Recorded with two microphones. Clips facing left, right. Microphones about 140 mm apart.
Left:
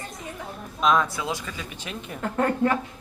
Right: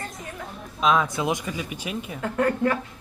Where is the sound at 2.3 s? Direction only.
30° left (ahead or behind).